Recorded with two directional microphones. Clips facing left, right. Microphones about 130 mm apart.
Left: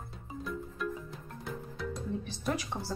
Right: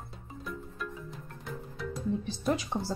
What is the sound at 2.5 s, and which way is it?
Speech, 25° right (ahead or behind).